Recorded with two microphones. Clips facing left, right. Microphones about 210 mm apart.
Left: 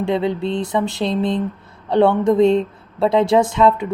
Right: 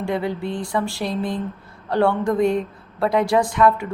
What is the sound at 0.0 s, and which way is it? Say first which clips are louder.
Speech: left 4 dB; 20° left (ahead or behind).